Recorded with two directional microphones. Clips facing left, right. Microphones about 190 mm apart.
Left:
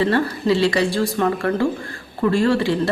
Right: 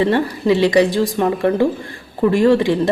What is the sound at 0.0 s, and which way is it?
A woman's voice, 20° right (ahead or behind).